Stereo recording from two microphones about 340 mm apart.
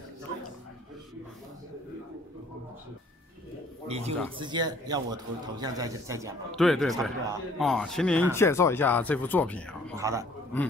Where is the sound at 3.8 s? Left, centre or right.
Centre.